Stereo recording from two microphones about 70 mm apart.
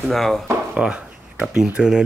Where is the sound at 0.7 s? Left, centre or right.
Centre.